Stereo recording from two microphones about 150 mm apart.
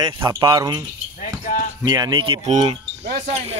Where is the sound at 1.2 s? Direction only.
65° left (ahead or behind).